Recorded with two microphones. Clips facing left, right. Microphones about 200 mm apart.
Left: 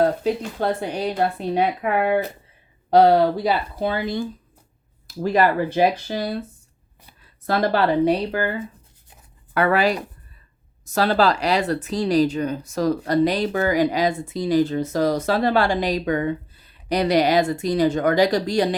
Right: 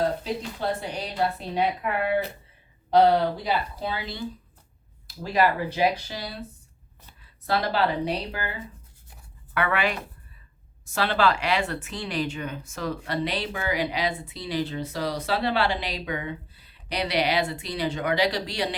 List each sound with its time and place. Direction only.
0.6 s speech: 55° left (ahead or behind)
9.6 s speech: 35° left (ahead or behind)